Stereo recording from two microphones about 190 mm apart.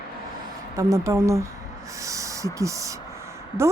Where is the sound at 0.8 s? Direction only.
15° right (ahead or behind).